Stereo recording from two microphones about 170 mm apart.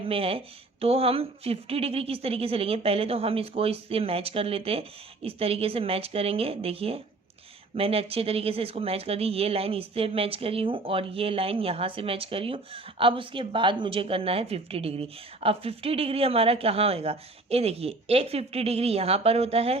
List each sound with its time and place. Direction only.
0.1 s speech: 35° right (ahead or behind)